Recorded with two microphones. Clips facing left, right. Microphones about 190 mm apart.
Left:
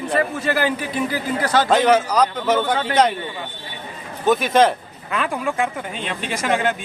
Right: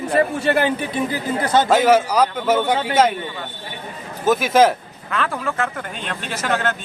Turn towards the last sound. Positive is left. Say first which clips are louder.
# left 2 dB
turn(degrees=10)  # may be behind; listen again after turning